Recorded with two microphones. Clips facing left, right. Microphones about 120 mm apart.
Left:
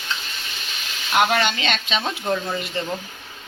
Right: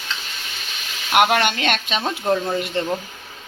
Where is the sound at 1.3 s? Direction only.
55° right (ahead or behind).